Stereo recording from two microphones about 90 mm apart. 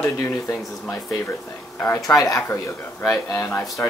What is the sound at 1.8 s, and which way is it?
Speech, 35° left (ahead or behind).